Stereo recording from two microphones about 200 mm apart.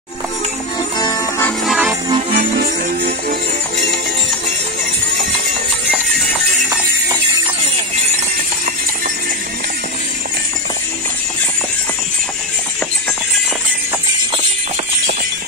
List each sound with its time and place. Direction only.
0.9 s music: 20° left (ahead or behind)
1.7 s music: 5° right (ahead or behind)
2.3 s music: 45° right (ahead or behind)